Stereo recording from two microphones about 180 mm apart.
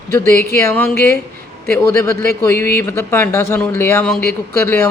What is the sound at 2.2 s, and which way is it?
A woman's voice, 15° left (ahead or behind).